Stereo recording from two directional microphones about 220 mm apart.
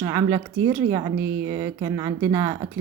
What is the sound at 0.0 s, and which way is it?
A woman's voice, 15° right (ahead or behind).